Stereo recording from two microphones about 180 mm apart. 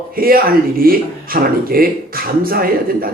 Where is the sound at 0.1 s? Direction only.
55° right (ahead or behind).